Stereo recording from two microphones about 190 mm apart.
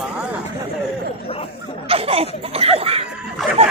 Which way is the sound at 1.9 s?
30° right (ahead or behind).